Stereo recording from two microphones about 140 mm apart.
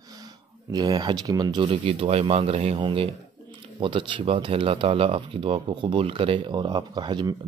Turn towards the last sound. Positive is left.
turn(degrees=-35)  # may be behind; listen again after turning